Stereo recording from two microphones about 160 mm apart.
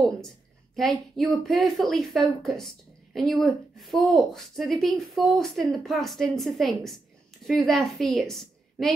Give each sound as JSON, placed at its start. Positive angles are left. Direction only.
{"t": 0.7, "sound": "a woman's voice", "side_deg": 0}